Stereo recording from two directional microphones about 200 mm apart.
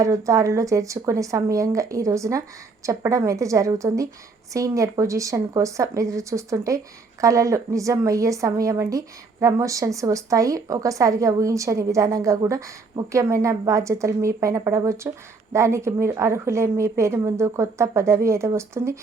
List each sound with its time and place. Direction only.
0.0 s a woman's voice: 15° right (ahead or behind)